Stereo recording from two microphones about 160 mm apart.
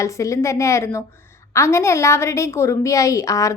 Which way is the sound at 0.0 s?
20° left (ahead or behind).